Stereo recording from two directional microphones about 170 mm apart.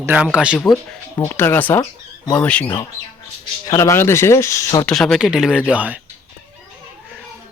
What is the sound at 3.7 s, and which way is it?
Speech, 20° left (ahead or behind).